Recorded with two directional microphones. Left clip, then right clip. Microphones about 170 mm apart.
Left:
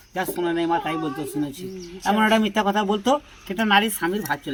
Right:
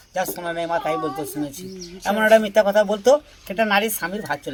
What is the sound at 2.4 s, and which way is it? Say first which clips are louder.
Speech: right 5 dB; 20° right (ahead or behind).